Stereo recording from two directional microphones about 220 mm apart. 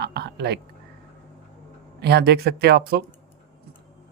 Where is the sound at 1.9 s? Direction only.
50° right (ahead or behind).